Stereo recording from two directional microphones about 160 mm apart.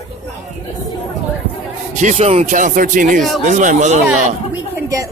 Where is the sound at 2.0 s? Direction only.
45° right (ahead or behind).